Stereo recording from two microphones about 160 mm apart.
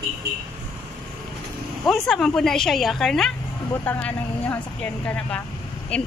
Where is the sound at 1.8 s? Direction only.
Centre (ahead or behind).